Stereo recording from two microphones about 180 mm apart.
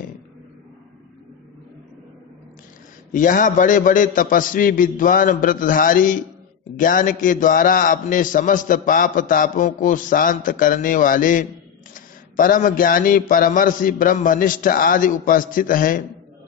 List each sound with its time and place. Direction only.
3.1 s a man's voice: 45° left (ahead or behind)